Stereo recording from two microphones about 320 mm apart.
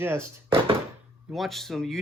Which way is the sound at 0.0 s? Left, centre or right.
Centre.